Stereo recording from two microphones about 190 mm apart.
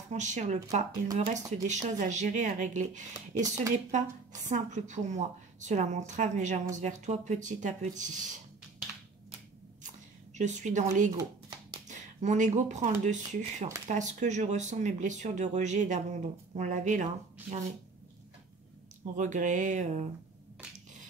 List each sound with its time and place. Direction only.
0.1 s speech: 40° right (ahead or behind)
9.8 s a sound: 40° right (ahead or behind)
11.9 s speech: 40° right (ahead or behind)
19.1 s speech: 40° right (ahead or behind)